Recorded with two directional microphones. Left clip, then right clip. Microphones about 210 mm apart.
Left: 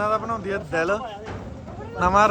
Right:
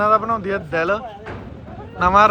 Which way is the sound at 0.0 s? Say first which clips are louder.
Right 7 dB; 10° left (ahead or behind).